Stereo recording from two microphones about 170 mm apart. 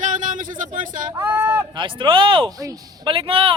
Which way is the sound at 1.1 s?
15° right (ahead or behind).